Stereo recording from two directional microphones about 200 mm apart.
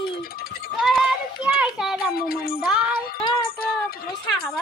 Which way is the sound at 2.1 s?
50° left (ahead or behind).